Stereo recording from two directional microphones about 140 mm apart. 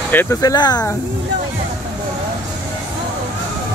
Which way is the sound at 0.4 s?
25° left (ahead or behind).